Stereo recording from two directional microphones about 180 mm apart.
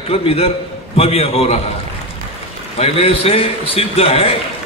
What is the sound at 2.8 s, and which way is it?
A man's voice, 35° left (ahead or behind).